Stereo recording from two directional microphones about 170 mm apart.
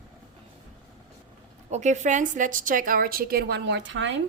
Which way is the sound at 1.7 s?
45° right (ahead or behind).